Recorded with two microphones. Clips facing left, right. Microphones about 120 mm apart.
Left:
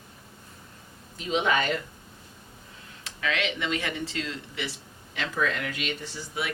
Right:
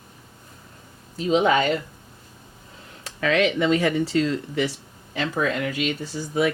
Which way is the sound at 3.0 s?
40° right (ahead or behind).